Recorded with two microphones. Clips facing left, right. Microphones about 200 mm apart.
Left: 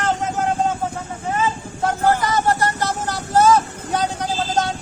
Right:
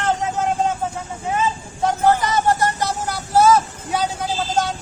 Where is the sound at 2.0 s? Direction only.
15° right (ahead or behind).